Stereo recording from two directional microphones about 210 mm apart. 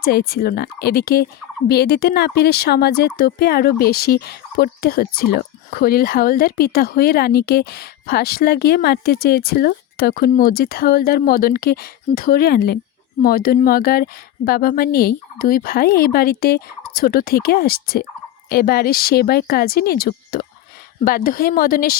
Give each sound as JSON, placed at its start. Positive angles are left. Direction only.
{"t": 0.0, "sound": "speech", "side_deg": 45}